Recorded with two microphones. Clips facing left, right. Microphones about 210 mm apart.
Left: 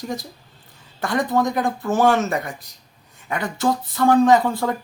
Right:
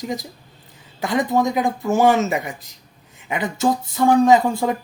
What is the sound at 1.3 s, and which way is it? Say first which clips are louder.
Speech: right 1 dB; 20° right (ahead or behind).